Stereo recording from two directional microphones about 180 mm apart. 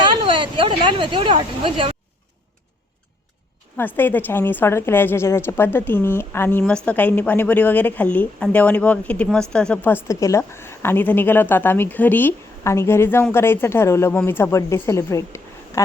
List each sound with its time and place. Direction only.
0.0 s speech: 25° right (ahead or behind)
3.8 s a woman's voice: 10° left (ahead or behind)